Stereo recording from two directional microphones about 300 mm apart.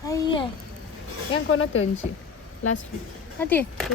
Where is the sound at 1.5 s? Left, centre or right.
Left.